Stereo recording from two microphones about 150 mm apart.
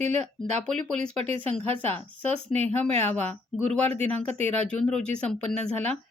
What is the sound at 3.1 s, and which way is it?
Speech, 10° left (ahead or behind).